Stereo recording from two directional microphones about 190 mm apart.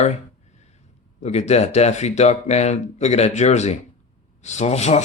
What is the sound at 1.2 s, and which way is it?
Speech, 35° left (ahead or behind).